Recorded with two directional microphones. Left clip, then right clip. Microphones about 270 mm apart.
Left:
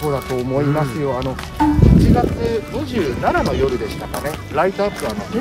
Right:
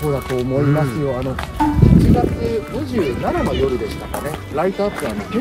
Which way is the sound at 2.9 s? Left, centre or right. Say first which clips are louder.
Left 2 dB; centre.